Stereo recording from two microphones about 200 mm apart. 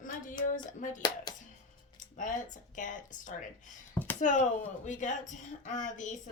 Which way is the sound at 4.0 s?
10° left (ahead or behind).